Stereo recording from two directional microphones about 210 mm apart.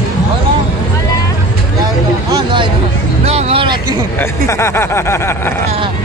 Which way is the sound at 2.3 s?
20° right (ahead or behind).